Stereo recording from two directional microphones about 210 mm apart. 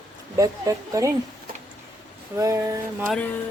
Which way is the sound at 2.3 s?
15° right (ahead or behind).